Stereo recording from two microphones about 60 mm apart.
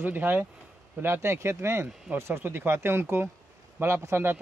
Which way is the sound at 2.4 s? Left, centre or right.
Right.